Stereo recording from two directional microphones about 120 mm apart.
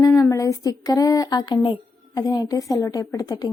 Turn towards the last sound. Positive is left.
turn(degrees=30)  # may be behind; listen again after turning